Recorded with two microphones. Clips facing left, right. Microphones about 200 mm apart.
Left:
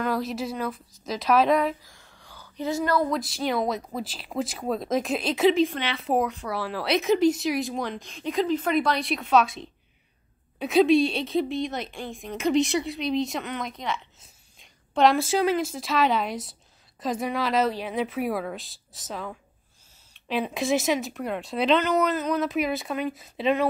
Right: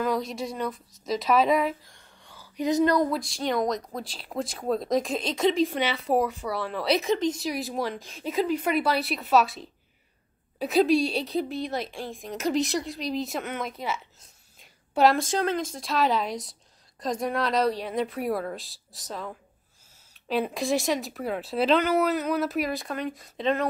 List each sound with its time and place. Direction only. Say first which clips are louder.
0.0 s a woman's voice: even; centre (ahead or behind); by 3.1 s 20° right (ahead or behind)
3.1 s a woman's voice: left 1 dB; 5° left (ahead or behind)